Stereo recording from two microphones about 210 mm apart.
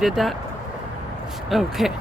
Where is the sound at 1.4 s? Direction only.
Centre (ahead or behind).